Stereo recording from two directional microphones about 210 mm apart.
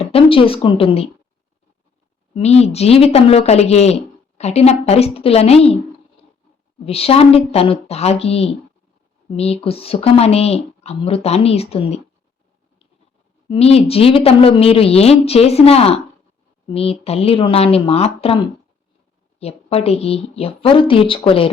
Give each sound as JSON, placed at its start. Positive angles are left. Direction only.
{"t": 0.0, "sound": "speech", "side_deg": 25}
{"t": 2.3, "sound": "speech", "side_deg": 30}
{"t": 6.8, "sound": "speech", "side_deg": 30}
{"t": 13.5, "sound": "speech", "side_deg": 30}